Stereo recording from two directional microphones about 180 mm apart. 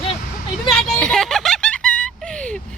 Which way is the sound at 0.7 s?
5° left (ahead or behind).